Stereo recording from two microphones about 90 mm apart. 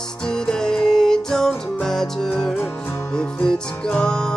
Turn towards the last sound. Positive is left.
turn(degrees=10)  # may be behind; listen again after turning